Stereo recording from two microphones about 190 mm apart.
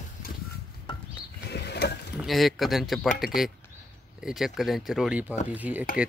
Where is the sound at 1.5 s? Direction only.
60° left (ahead or behind).